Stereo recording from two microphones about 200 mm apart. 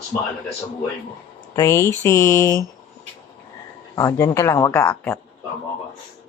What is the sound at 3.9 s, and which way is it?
Speech, 15° left (ahead or behind).